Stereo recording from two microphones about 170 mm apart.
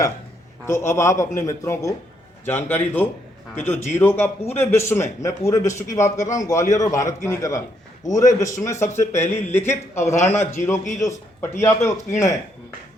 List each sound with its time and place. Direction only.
0.6 s a man's voice: 15° left (ahead or behind)
10.3 s a man's voice: 45° left (ahead or behind)
11.0 s speech: 15° left (ahead or behind)